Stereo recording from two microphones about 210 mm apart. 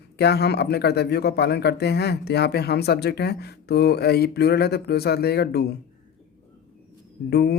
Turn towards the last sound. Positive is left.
turn(degrees=50)  # may be behind; listen again after turning